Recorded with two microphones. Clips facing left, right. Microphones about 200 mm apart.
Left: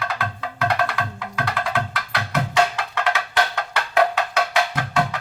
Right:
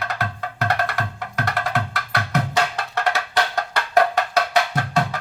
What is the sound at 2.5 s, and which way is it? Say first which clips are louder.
Music: left 2 dB; 40° right (ahead or behind).